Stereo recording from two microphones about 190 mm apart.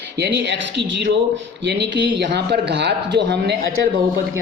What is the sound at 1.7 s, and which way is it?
Speech, 65° right (ahead or behind).